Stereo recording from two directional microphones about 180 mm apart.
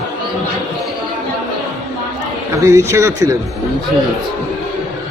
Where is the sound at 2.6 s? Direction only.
15° right (ahead or behind).